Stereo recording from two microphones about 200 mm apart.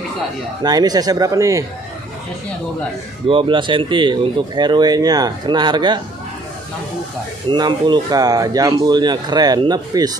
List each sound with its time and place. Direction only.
0.7 s speech: 20° right (ahead or behind)
3.3 s speech: 25° right (ahead or behind)
7.5 s speech: 20° right (ahead or behind)